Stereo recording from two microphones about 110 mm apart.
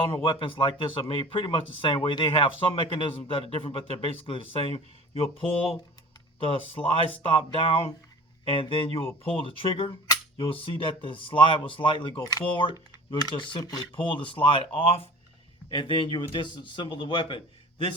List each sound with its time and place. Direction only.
0.0 s a man's voice: 55° left (ahead or behind)
5.4 s speech: 5° left (ahead or behind)
6.8 s a man's voice: 60° left (ahead or behind); by 13.8 s 40° left (ahead or behind)
13.9 s speech: 50° left (ahead or behind)
15.7 s speech: 45° left (ahead or behind)